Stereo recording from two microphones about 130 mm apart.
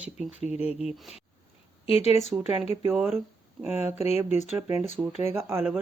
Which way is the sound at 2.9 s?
Centre (ahead or behind).